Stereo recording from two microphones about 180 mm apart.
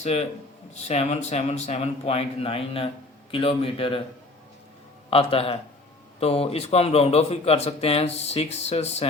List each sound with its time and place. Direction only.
0.0 s a man's voice: 35° left (ahead or behind)
5.1 s a man's voice: 30° left (ahead or behind)